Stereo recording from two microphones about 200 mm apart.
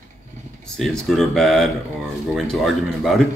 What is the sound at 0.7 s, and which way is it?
Speech, centre (ahead or behind).